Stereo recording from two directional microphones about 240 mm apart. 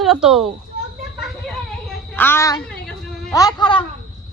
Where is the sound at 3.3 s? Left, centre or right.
Centre.